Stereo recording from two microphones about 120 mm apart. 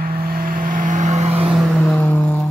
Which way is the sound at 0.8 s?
85° right.